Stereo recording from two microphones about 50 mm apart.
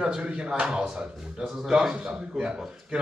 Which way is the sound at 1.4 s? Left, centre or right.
Centre.